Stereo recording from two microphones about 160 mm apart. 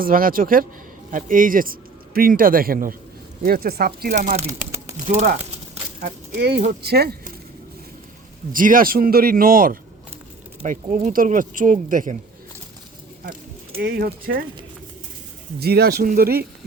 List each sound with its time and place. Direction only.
0.0 s speech: 60° right (ahead or behind)
4.1 s speech: 55° right (ahead or behind)
4.4 s a sound: 15° right (ahead or behind)
5.0 s speech: 60° right (ahead or behind)
6.3 s speech: 80° right
8.5 s speech: 60° right (ahead or behind)
13.7 s speech: 75° right (ahead or behind)
15.5 s speech: 80° right